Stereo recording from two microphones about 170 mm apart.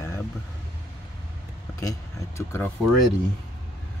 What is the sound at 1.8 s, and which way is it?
Speech, 15° left (ahead or behind).